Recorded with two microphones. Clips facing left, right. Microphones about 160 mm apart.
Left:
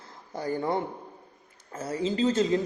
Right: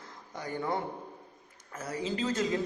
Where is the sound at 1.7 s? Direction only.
30° left (ahead or behind).